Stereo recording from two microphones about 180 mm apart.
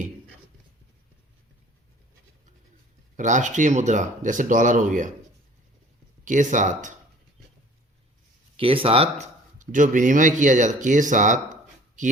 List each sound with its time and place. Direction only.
3.2 s speech: 45° right (ahead or behind)
6.2 s speech: 45° right (ahead or behind)
8.5 s speech: 30° right (ahead or behind)